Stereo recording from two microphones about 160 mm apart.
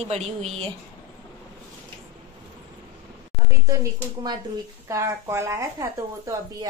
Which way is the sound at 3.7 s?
25° right (ahead or behind).